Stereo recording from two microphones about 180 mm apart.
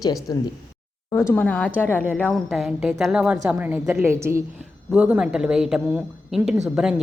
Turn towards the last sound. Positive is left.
turn(degrees=-5)  # may be behind; listen again after turning